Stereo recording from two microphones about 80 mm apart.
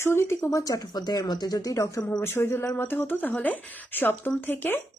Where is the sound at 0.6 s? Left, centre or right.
Left.